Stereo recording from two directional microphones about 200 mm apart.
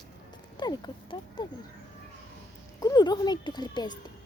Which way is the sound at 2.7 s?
20° left (ahead or behind).